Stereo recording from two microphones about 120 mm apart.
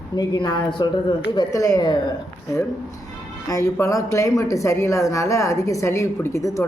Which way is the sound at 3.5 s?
25° left (ahead or behind).